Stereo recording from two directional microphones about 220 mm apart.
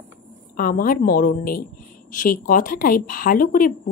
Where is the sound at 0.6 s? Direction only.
40° left (ahead or behind).